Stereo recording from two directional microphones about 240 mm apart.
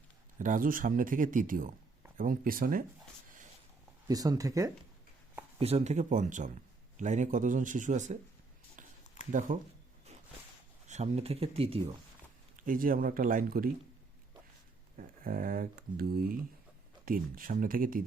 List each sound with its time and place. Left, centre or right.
0.3 s speech: right
4.1 s speech: centre
5.5 s speech: right
9.2 s a sound: left
10.8 s speech: right
12.5 s speech: right
14.9 s speech: right